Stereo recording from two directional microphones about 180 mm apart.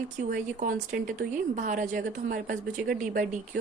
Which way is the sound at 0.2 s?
45° right (ahead or behind).